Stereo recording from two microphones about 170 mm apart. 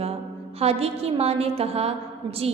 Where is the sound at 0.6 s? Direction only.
35° right (ahead or behind).